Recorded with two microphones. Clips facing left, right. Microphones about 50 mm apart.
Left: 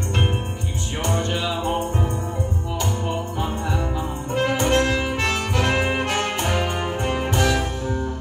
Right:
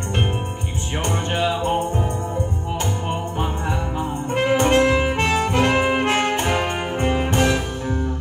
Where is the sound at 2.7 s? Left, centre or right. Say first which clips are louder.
Even; right.